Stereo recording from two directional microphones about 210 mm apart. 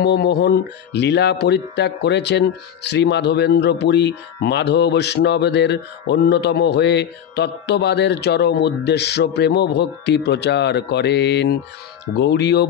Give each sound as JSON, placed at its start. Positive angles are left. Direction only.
{"t": 0.0, "sound": "speech", "side_deg": 50}